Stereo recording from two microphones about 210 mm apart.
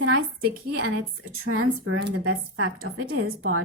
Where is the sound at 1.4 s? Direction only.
80° right.